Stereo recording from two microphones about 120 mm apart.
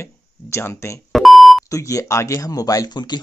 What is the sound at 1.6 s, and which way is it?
Speech, 25° left (ahead or behind).